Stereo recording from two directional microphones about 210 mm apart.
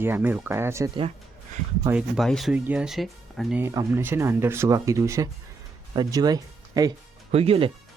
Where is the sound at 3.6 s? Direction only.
15° right (ahead or behind).